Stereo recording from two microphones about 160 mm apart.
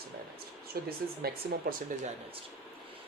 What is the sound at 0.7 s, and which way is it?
Speech, 75° right (ahead or behind).